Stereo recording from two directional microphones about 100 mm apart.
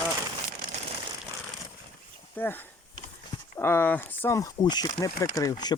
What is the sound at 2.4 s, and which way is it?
Speech, 20° left (ahead or behind).